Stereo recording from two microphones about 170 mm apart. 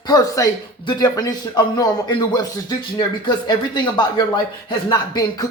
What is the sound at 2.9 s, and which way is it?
Speech, 25° left (ahead or behind).